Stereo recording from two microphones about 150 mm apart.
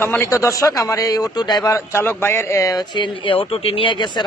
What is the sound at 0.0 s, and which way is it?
A man's voice, 15° left (ahead or behind).